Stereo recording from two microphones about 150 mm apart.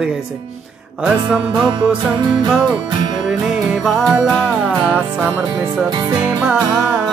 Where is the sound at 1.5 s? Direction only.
30° right (ahead or behind).